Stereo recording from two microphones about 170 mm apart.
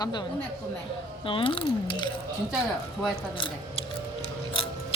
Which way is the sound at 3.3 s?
30° left (ahead or behind).